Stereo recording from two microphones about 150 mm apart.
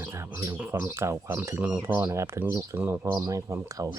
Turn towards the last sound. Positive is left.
turn(degrees=-20)  # may be behind; listen again after turning